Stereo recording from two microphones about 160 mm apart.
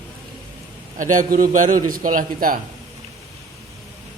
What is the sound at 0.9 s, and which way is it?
A man's voice, 55° right (ahead or behind).